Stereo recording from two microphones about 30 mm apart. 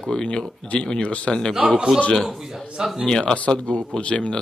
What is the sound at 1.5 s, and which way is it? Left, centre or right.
Speech, right.